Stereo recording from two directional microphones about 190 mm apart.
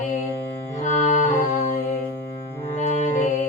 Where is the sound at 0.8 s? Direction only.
40° left (ahead or behind).